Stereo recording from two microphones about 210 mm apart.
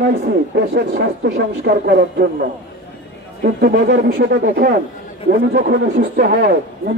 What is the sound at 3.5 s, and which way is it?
Speech, 55° right (ahead or behind).